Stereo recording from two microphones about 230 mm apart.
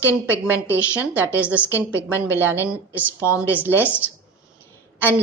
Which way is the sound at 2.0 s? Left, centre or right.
Centre.